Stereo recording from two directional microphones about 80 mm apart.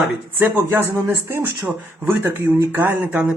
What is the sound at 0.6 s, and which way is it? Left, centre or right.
Speech, right.